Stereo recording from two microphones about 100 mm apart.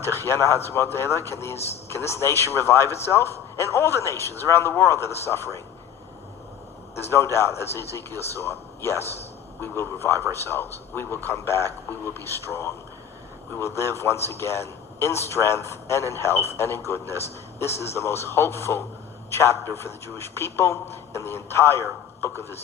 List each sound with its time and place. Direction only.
0.0 s a man's voice: 25° left (ahead or behind)
1.5 s speech: 90° left
2.0 s a man's voice: 25° left (ahead or behind)
6.9 s a man's voice: 25° left (ahead or behind)